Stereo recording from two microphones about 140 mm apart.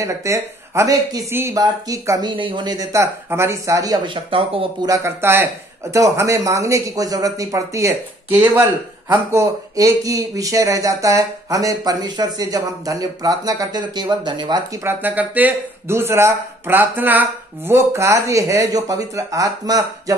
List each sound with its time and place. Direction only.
0.0 s speech: 20° right (ahead or behind); by 4.6 s 40° right (ahead or behind)
4.8 s speech: 20° right (ahead or behind)